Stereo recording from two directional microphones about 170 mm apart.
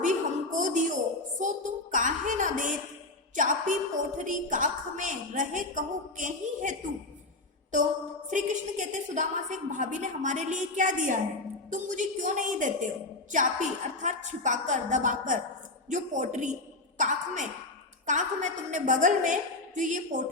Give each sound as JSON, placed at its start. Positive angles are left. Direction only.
{"t": 0.0, "sound": "music", "side_deg": -50}
{"t": 1.4, "sound": "a sound", "side_deg": -50}
{"t": 3.3, "sound": "a woman's voice", "side_deg": -50}
{"t": 8.3, "sound": "a woman's voice", "side_deg": -45}